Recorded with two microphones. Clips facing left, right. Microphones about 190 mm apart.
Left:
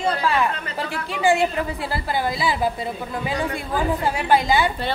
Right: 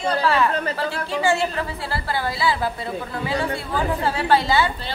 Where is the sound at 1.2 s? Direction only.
15° left (ahead or behind).